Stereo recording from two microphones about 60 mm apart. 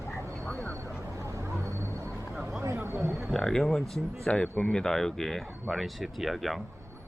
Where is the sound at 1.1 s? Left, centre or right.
Right.